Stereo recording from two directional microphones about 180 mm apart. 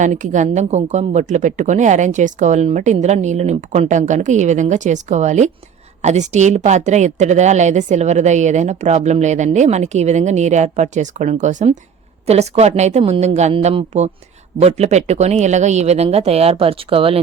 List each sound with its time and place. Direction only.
0.0 s a woman's voice: 45° right (ahead or behind)